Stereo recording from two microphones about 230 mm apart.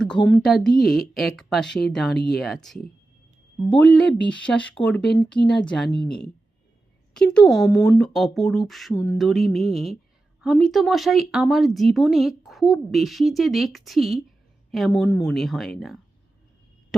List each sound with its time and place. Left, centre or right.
0.0 s speech: centre
2.1 s speech: left
2.4 s speech: centre
5.5 s speech: centre